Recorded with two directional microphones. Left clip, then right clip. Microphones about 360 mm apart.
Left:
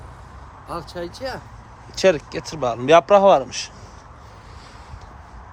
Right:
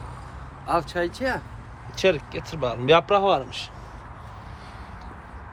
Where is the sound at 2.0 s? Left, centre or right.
Centre.